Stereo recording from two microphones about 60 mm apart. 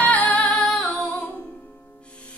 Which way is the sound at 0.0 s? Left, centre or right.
Left.